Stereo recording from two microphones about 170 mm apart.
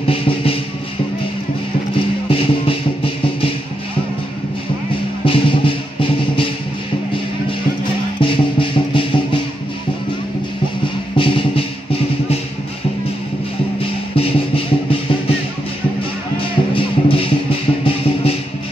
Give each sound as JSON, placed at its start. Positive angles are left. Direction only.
{"t": 0.0, "sound": "music", "side_deg": 35}
{"t": 2.2, "sound": "music", "side_deg": 30}
{"t": 5.2, "sound": "music", "side_deg": 30}
{"t": 8.2, "sound": "music", "side_deg": 30}
{"t": 11.1, "sound": "music", "side_deg": 30}
{"t": 14.1, "sound": "music", "side_deg": 35}
{"t": 16.3, "sound": "music", "side_deg": 30}